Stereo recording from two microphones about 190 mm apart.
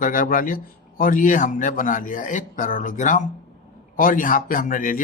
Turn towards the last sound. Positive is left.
turn(degrees=45)  # may be behind; listen again after turning